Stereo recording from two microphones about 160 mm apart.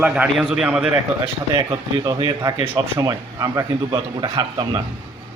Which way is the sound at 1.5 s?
25° right (ahead or behind).